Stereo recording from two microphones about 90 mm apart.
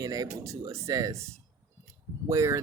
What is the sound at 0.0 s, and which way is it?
Speech, 40° right (ahead or behind).